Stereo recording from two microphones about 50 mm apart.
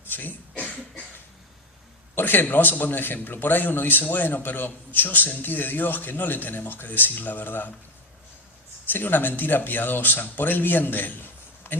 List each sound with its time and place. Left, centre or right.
0.1 s a sound: left
2.1 s a man's voice: left
8.9 s a man's voice: left